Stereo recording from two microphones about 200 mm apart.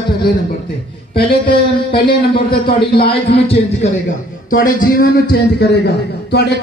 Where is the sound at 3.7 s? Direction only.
40° left (ahead or behind).